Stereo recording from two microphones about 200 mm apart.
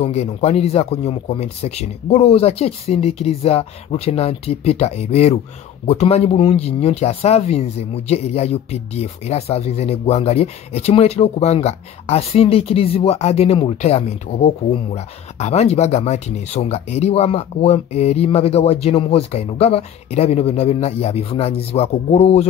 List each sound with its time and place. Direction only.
0.0 s speech: 30° left (ahead or behind)